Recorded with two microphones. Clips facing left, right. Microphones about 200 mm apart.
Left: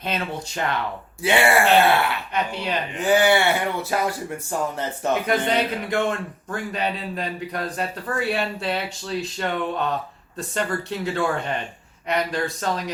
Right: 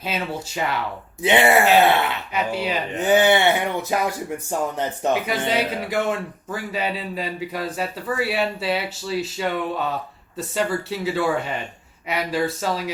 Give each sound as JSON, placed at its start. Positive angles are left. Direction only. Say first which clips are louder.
{"t": 0.0, "sound": "speech", "louder": "right 1 dB", "side_deg": -5}
{"t": 1.2, "sound": "speech", "louder": "right 2 dB", "side_deg": -20}
{"t": 2.3, "sound": "speech", "louder": "right 2 dB", "side_deg": -5}
{"t": 3.0, "sound": "speech", "louder": "right 1 dB", "side_deg": -20}
{"t": 5.2, "sound": "speech", "louder": "left 1 dB", "side_deg": -5}